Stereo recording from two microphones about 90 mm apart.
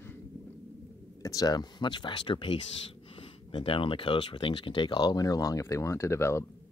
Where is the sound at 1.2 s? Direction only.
40° left (ahead or behind); by 2.6 s 65° left (ahead or behind).